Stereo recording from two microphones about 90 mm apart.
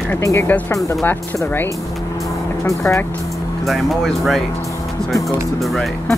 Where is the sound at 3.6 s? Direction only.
Centre (ahead or behind).